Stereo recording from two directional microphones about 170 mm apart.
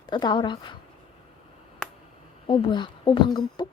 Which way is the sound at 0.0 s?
25° left (ahead or behind).